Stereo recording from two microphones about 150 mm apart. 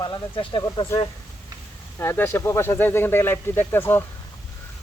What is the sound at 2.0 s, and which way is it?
Speech, 15° left (ahead or behind).